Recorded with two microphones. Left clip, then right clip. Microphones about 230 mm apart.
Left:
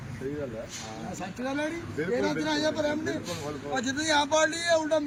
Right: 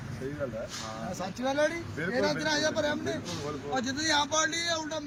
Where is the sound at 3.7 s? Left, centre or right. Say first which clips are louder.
Left 2 dB; left.